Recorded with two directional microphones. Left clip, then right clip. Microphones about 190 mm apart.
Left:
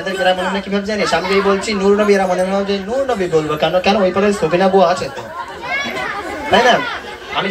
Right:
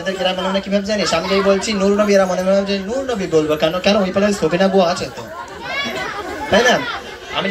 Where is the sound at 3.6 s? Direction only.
45° right (ahead or behind).